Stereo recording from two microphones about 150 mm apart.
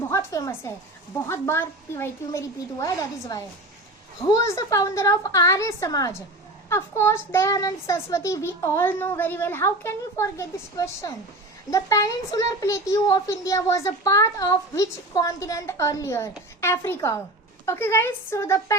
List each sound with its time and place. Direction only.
0.1 s a woman's voice: 20° left (ahead or behind)